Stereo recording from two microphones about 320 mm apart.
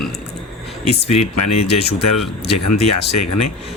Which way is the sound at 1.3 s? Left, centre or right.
Left.